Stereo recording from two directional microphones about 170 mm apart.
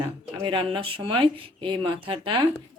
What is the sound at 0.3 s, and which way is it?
Speech, 30° right (ahead or behind).